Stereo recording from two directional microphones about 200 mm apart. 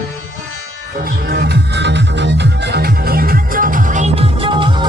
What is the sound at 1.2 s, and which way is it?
Music, 50° right (ahead or behind).